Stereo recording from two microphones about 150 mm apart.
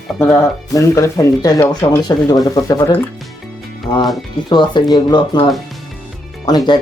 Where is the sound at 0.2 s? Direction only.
20° left (ahead or behind).